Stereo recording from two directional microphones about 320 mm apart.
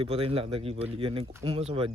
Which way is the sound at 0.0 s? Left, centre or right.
Centre.